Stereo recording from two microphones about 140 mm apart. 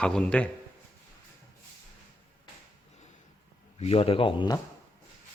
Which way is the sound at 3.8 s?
45° left (ahead or behind).